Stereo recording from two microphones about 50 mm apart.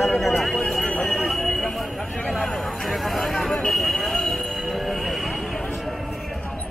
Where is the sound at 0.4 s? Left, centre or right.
Centre.